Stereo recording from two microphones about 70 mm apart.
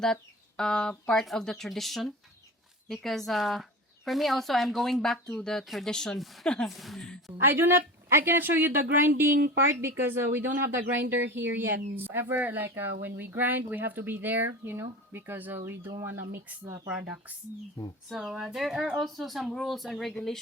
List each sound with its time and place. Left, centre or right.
0.0 s speech: centre
5.9 s speech: centre
6.1 s speech: centre
7.3 s a woman's voice: right
17.0 s speech: right
18.1 s speech: centre